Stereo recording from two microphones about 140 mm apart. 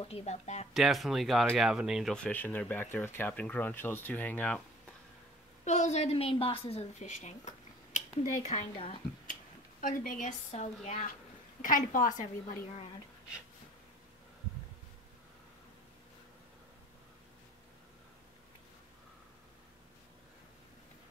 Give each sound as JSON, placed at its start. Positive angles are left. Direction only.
{"t": 0.0, "sound": "a woman's voice", "side_deg": 50}
{"t": 0.7, "sound": "speech", "side_deg": 0}
{"t": 2.1, "sound": "speech", "side_deg": 10}
{"t": 5.7, "sound": "a woman's voice", "side_deg": 55}
{"t": 9.3, "sound": "speech", "side_deg": 75}
{"t": 11.6, "sound": "a woman's voice", "side_deg": 75}